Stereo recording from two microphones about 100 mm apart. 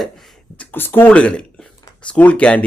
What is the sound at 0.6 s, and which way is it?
Speech, 20° left (ahead or behind).